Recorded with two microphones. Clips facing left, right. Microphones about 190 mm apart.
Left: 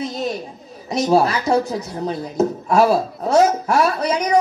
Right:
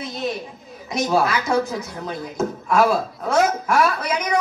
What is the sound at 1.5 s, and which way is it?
Speech, 35° left (ahead or behind).